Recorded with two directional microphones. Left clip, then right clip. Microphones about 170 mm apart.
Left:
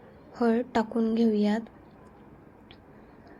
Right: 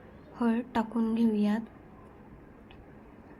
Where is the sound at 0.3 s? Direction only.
25° left (ahead or behind).